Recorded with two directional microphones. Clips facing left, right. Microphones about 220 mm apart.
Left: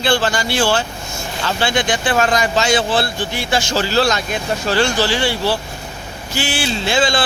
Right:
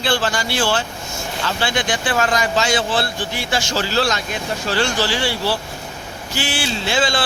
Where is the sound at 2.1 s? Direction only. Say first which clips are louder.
Left 2 dB; 25° left (ahead or behind).